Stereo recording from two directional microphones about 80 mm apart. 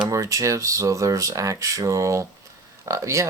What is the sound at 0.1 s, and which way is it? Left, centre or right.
Speech, right.